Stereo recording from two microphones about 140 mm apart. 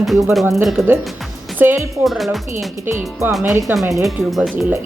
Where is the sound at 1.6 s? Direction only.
15° right (ahead or behind).